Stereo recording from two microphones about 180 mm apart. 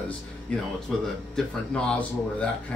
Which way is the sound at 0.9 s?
Centre (ahead or behind).